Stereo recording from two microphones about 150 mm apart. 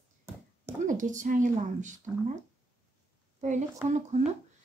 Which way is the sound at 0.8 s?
60° right (ahead or behind).